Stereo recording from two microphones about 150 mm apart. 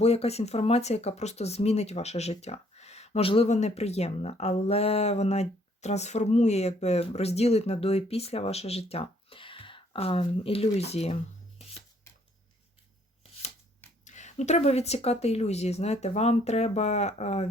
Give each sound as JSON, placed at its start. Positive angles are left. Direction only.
{"t": 0.0, "sound": "speech", "side_deg": 45}
{"t": 14.0, "sound": "speech", "side_deg": 55}